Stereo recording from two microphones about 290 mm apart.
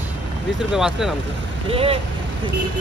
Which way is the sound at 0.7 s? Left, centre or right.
Centre.